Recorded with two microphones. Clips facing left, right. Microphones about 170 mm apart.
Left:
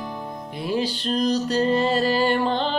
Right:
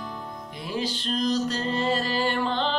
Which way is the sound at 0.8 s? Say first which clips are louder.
Left 2 dB; 35° left (ahead or behind).